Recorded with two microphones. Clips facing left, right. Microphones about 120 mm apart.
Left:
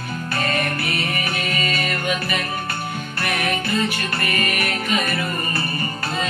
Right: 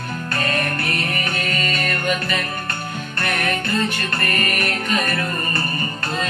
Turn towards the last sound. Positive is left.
turn(degrees=5)  # may be behind; listen again after turning